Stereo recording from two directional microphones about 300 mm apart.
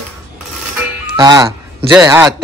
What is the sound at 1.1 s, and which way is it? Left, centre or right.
Speech, centre.